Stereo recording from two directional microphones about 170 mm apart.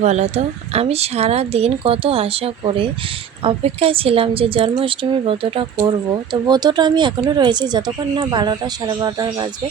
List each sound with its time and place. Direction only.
0.0 s speech: 40° right (ahead or behind); by 9.5 s 25° right (ahead or behind)